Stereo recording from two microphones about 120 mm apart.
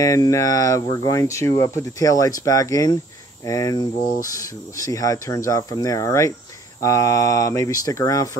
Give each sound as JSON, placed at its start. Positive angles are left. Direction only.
{"t": 0.0, "sound": "speech", "side_deg": 30}